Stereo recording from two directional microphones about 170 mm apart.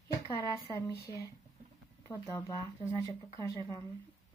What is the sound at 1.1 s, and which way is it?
A woman's voice, 25° left (ahead or behind).